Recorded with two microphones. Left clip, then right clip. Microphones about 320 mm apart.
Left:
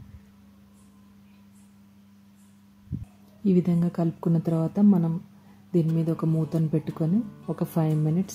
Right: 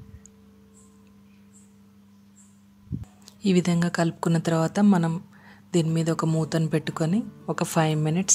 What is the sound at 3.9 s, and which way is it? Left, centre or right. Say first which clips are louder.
Speech: right 3 dB; right.